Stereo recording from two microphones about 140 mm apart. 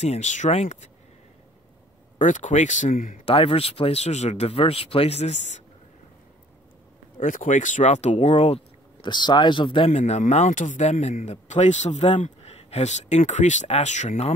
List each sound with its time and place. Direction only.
0.0 s speech: 55° left (ahead or behind)
2.1 s speech: 65° left (ahead or behind)
3.3 s speech: 45° left (ahead or behind)
7.2 s speech: 65° left (ahead or behind); by 8.5 s 50° left (ahead or behind)
9.0 s speech: 30° left (ahead or behind); by 14.3 s 55° left (ahead or behind)